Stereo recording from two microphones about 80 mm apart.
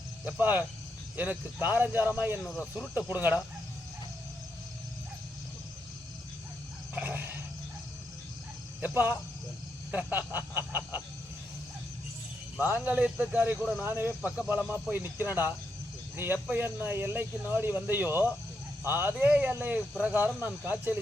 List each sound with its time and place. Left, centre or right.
0.3 s speech: right
2.4 s speech: centre
3.1 s speech: right
6.9 s wild animals: right
8.8 s speech: centre
10.7 s a sound: right
12.5 s speech: right
14.2 s speech: centre
14.7 s speech: right